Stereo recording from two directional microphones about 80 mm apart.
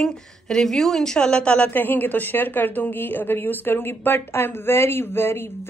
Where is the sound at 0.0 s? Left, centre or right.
Centre.